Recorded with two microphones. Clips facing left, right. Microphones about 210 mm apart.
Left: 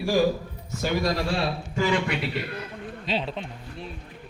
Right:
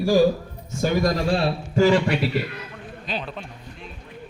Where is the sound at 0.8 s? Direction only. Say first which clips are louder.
Right 4 dB; 45° right (ahead or behind).